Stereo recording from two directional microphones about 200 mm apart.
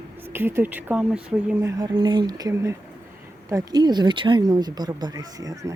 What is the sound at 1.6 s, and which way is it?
Speech, 20° right (ahead or behind).